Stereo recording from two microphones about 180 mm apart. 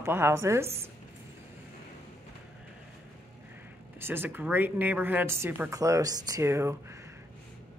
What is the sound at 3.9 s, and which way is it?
Speech, 10° right (ahead or behind).